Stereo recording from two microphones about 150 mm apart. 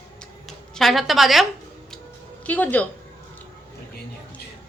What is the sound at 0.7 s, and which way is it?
Speech, centre (ahead or behind).